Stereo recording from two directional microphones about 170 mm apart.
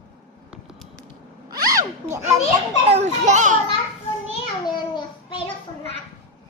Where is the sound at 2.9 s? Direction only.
40° right (ahead or behind).